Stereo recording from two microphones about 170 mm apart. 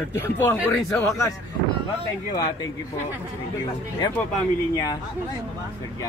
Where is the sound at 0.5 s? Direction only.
Centre (ahead or behind).